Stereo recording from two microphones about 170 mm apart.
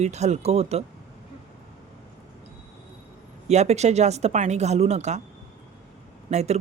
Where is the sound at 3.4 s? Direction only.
40° right (ahead or behind).